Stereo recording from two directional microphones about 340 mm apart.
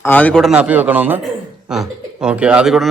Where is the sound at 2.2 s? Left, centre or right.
Centre.